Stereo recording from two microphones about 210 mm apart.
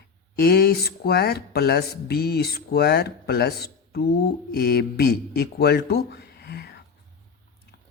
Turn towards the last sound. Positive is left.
turn(degrees=50)  # may be behind; listen again after turning